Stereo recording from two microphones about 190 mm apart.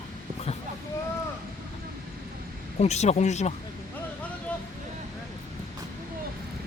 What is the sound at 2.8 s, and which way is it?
Speech, 35° left (ahead or behind).